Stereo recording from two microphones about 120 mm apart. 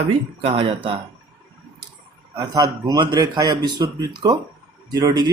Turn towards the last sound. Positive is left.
turn(degrees=-35)  # may be behind; listen again after turning